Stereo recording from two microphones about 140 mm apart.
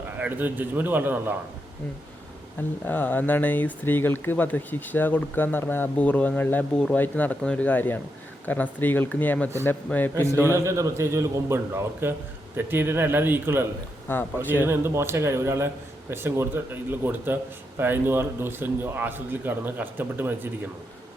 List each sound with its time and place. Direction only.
0.2 s a man's voice: 15° right (ahead or behind)
2.8 s speech: 15° left (ahead or behind)
10.5 s a man's voice: 20° right (ahead or behind)
14.1 s speech: 15° left (ahead or behind)
14.6 s a man's voice: 15° right (ahead or behind)